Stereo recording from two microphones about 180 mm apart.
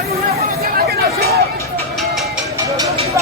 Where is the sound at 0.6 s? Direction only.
60° right (ahead or behind).